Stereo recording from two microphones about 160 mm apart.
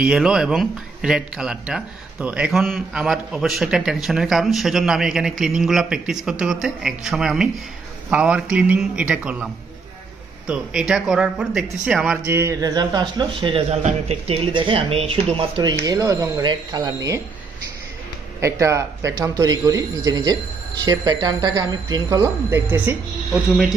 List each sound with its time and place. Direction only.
0.0 s speech: 5° right (ahead or behind)
12.3 s speech: 15° right (ahead or behind); by 15.7 s 35° right (ahead or behind)
15.8 s speech: 20° right (ahead or behind)
18.4 s speech: 20° right (ahead or behind)